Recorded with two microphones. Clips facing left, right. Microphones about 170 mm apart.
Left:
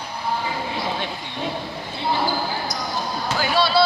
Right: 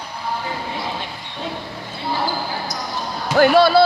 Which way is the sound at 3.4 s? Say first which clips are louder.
Right 9 dB; 55° right (ahead or behind).